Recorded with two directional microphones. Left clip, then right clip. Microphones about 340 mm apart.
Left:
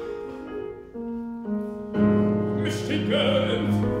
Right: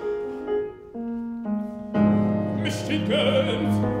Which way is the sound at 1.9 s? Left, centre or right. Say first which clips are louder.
Even; centre.